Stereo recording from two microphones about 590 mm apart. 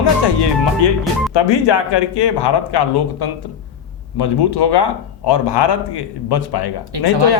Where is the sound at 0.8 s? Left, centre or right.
Left.